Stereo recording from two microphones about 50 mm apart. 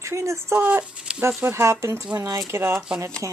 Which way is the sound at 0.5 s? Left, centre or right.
Right.